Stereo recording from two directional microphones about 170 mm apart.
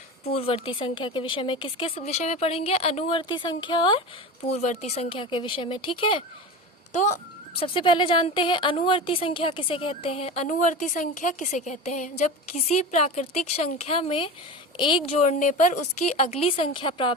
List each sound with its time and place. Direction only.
0.3 s a child's voice: 35° left (ahead or behind)
4.4 s a child's voice: 40° left (ahead or behind)
6.9 s a child's voice: 45° left (ahead or behind); by 15.1 s 30° left (ahead or behind)
15.2 s a child's voice: 45° left (ahead or behind); by 17.2 s 30° left (ahead or behind)